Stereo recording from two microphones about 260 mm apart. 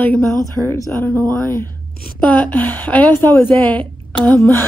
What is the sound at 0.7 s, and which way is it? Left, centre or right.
A woman's voice, centre.